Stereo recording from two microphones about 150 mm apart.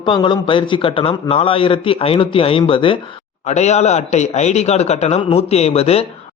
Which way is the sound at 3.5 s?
50° left (ahead or behind).